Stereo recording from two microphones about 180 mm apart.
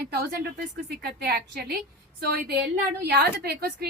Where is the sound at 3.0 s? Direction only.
65° right (ahead or behind).